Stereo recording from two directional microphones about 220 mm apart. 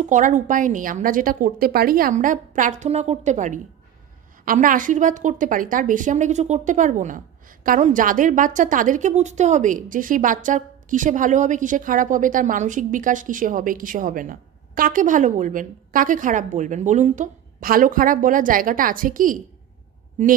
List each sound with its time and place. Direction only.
0.0 s speech: 35° right (ahead or behind)